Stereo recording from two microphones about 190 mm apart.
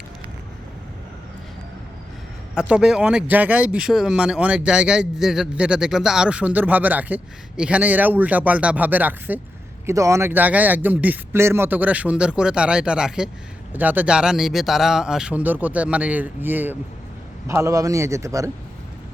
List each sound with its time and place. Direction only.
2.6 s speech: 5° right (ahead or behind)